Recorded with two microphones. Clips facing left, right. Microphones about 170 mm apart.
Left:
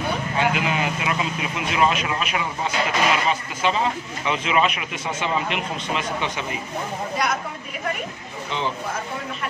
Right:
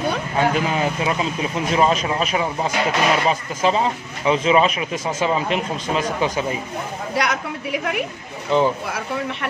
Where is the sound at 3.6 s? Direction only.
35° right (ahead or behind).